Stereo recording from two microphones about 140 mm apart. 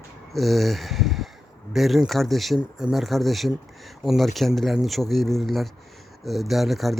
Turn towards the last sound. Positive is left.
turn(degrees=0)  # may be behind; listen again after turning